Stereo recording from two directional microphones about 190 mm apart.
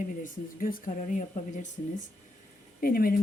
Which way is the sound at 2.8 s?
50° left (ahead or behind).